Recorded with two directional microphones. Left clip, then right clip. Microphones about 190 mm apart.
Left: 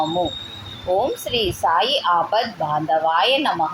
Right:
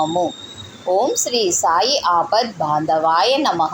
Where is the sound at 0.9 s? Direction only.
30° right (ahead or behind).